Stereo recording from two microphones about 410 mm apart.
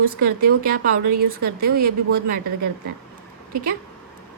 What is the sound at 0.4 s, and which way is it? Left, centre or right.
A woman's voice, right.